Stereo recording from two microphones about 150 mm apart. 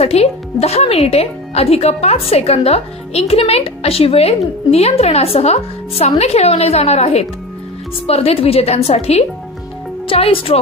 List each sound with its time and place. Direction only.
0.0 s speech: 45° left (ahead or behind)